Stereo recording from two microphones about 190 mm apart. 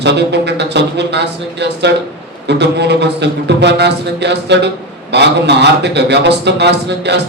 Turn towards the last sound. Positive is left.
turn(degrees=-65)  # may be behind; listen again after turning